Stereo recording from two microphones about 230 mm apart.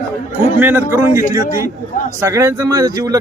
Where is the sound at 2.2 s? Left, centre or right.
Centre.